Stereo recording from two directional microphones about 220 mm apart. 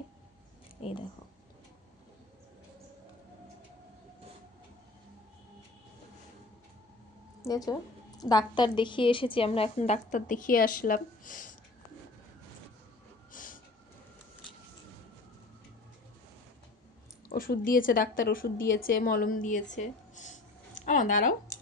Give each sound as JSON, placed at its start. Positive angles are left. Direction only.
{"t": 7.4, "sound": "a woman's voice", "side_deg": 15}
{"t": 13.3, "sound": "vehicle", "side_deg": 40}
{"t": 17.3, "sound": "speech", "side_deg": 40}
{"t": 19.7, "sound": "a sound", "side_deg": 35}